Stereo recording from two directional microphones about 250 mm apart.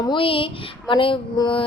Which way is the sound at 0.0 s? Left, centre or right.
Centre.